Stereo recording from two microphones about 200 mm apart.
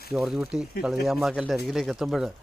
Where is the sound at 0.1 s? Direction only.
5° right (ahead or behind).